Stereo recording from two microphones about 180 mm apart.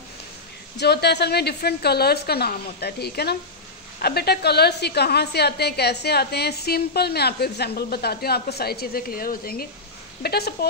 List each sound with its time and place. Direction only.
0.7 s a woman's voice: 65° left (ahead or behind)